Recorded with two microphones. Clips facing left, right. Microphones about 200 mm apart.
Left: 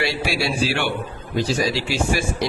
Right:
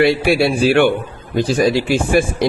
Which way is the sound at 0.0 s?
55° right (ahead or behind).